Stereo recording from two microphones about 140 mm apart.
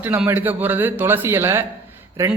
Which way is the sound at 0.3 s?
15° right (ahead or behind).